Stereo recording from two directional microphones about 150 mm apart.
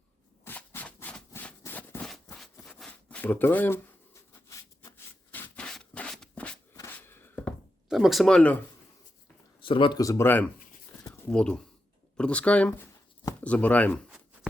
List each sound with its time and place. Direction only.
0.4 s a sound: 15° left (ahead or behind)
7.9 s speech: centre (ahead or behind)
9.6 s speech: 35° left (ahead or behind)
10.0 s speech: 20° left (ahead or behind)